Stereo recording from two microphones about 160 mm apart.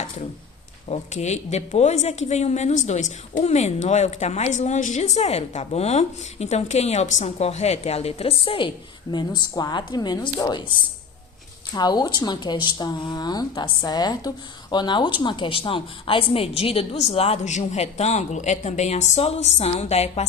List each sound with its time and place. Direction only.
0.9 s a woman's voice: 45° left (ahead or behind); by 10.7 s 25° left (ahead or behind)
11.7 s speech: 25° left (ahead or behind); by 20.2 s 40° left (ahead or behind)